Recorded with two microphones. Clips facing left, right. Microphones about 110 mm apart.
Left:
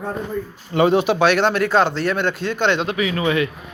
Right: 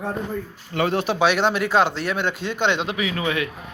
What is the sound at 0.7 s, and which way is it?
Speech, 20° left (ahead or behind).